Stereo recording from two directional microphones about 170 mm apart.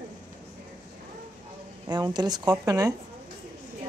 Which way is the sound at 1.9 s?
25° right (ahead or behind).